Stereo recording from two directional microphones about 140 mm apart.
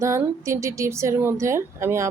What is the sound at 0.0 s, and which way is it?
A woman's voice, 20° right (ahead or behind).